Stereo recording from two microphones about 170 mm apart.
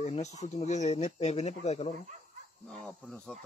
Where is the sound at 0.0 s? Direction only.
40° left (ahead or behind).